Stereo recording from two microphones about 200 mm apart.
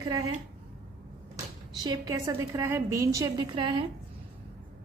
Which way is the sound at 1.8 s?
20° right (ahead or behind).